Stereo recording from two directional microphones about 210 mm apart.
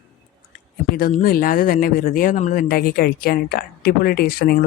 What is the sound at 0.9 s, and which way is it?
Speech, 45° left (ahead or behind).